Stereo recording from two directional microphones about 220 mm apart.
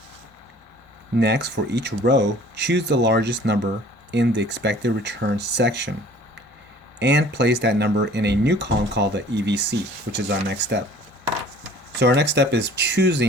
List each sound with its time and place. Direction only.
1.2 s speech: 50° right (ahead or behind)
7.0 s speech: 50° right (ahead or behind)
11.9 s speech: 50° right (ahead or behind)